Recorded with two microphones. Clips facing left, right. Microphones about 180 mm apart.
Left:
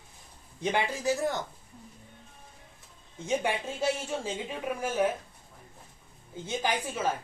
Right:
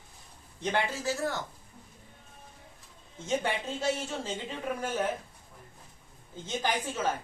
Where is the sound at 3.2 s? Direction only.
10° left (ahead or behind).